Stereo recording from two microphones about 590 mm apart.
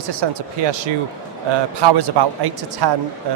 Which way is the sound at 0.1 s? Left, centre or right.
Right.